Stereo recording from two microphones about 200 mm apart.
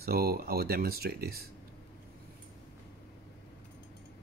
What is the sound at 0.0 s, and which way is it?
Speech, 50° right (ahead or behind).